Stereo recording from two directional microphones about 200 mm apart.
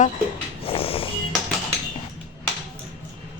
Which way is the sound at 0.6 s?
30° left (ahead or behind).